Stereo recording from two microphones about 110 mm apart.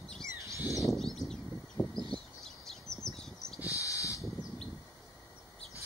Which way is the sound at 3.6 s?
30° left (ahead or behind).